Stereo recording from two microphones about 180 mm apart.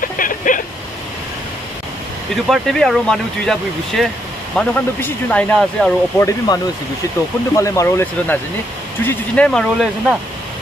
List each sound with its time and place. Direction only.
0.2 s vehicle: 50° left (ahead or behind)
2.4 s speech: centre (ahead or behind)
6.1 s speech: 15° left (ahead or behind)